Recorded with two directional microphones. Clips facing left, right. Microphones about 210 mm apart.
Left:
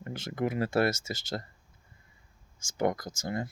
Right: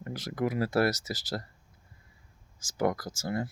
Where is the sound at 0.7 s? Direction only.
25° left (ahead or behind).